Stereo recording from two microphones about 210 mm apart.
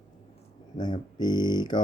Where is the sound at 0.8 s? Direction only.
20° left (ahead or behind).